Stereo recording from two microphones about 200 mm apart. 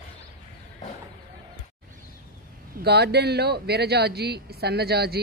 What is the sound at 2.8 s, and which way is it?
Speech, 55° right (ahead or behind).